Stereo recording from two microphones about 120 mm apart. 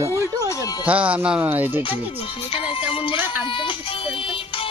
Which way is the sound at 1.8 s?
45° left (ahead or behind).